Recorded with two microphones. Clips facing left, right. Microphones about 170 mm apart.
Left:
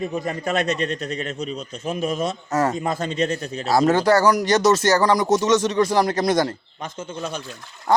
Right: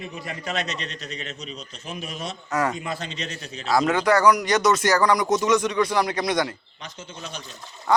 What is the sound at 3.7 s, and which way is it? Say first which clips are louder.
Speech: left 3 dB; 30° left (ahead or behind).